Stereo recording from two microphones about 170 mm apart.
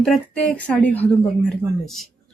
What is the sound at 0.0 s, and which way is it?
A woman's voice, 5° left (ahead or behind).